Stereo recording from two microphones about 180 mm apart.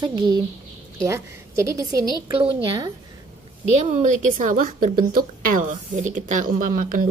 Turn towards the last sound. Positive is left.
turn(degrees=-50)  # may be behind; listen again after turning